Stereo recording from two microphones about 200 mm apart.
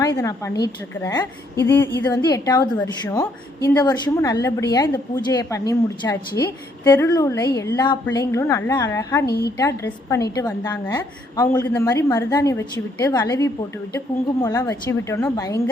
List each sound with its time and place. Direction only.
0.0 s a woman's voice: 15° left (ahead or behind)
9.2 s a woman's voice: 50° left (ahead or behind)
9.6 s a woman's voice: 15° left (ahead or behind)